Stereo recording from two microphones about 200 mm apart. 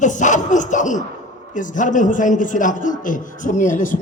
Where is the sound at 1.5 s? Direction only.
40° left (ahead or behind).